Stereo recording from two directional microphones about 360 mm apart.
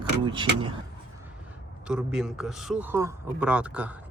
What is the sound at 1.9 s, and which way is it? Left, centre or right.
A man's voice, centre.